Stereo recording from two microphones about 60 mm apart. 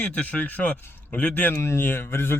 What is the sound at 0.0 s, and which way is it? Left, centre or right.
Speech, left.